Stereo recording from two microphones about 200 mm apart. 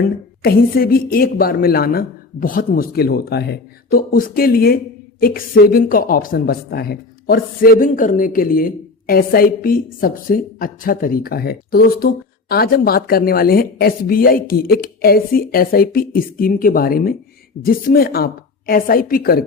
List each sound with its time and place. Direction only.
0.0 s a woman's voice: 50° left (ahead or behind)